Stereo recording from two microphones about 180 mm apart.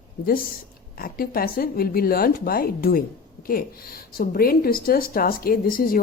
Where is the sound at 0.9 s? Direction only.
55° left (ahead or behind).